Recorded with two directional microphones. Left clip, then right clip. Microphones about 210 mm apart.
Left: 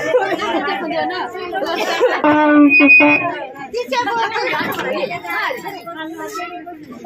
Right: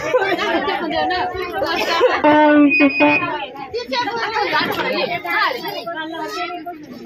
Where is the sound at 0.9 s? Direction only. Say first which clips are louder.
Right 1 dB; centre (ahead or behind).